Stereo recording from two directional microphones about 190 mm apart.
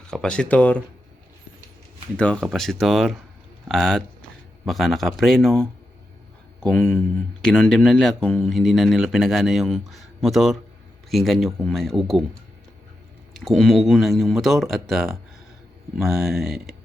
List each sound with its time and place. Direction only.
0.1 s speech: 5° left (ahead or behind)
2.1 s speech: 5° left (ahead or behind)
13.4 s speech: centre (ahead or behind)